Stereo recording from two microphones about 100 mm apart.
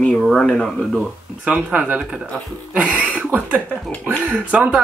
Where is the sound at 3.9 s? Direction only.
15° left (ahead or behind).